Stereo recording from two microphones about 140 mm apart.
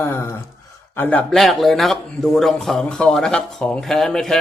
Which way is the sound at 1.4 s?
Centre (ahead or behind).